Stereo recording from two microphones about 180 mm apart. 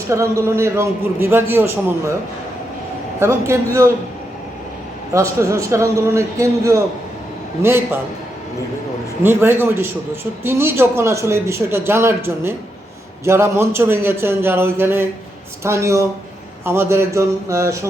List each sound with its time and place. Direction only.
0.1 s a man's voice: 15° right (ahead or behind)
3.2 s a man's voice: 15° right (ahead or behind)
5.1 s a man's voice: 15° right (ahead or behind)
9.2 s a man's voice: 10° right (ahead or behind)